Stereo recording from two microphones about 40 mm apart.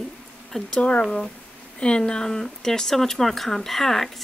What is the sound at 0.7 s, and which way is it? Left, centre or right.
Speech, left.